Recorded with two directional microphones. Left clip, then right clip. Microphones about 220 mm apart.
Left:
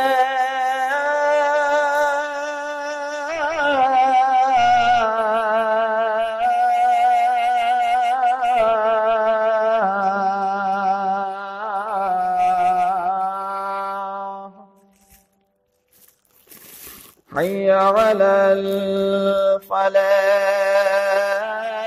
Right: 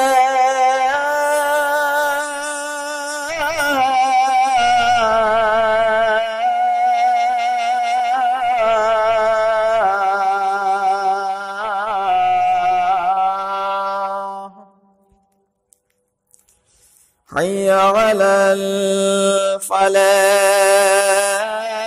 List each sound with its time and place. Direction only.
0.0 s music: 40° right (ahead or behind)
17.3 s mantra: 45° right (ahead or behind)